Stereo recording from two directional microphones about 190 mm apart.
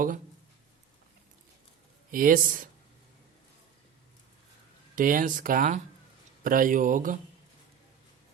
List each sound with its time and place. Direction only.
2.0 s speech: 45° right (ahead or behind)
4.9 s speech: 45° right (ahead or behind)